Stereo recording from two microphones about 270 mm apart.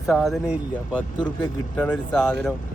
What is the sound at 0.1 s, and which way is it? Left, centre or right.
Speech, centre.